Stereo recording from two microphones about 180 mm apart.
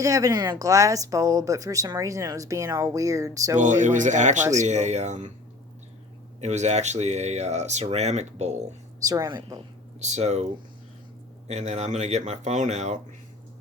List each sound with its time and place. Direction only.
0.0 s speech: 20° right (ahead or behind)
3.6 s speech: 45° right (ahead or behind)
6.4 s speech: 40° right (ahead or behind)
9.0 s speech: 20° right (ahead or behind)
10.0 s speech: 40° right (ahead or behind)
11.4 s speech: 40° right (ahead or behind)